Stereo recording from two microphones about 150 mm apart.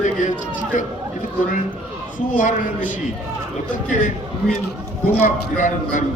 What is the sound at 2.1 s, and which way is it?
Speech, 60° left (ahead or behind).